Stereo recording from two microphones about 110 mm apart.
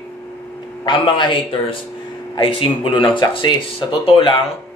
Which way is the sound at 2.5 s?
50° left (ahead or behind).